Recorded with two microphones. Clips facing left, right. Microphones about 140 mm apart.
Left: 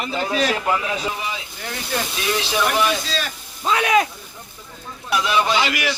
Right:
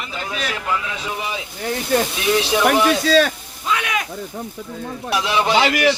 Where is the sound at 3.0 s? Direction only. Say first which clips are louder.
Right 12 dB; 65° right (ahead or behind).